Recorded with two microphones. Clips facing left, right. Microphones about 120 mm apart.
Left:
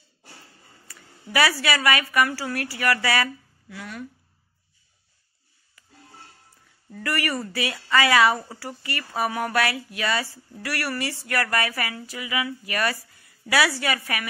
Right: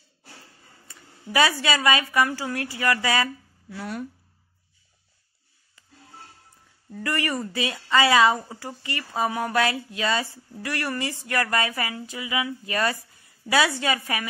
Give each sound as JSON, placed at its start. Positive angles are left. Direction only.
{"t": 0.8, "sound": "speech", "side_deg": -20}
{"t": 3.7, "sound": "speech", "side_deg": -40}
{"t": 5.8, "sound": "music", "side_deg": -25}
{"t": 7.0, "sound": "speech", "side_deg": -20}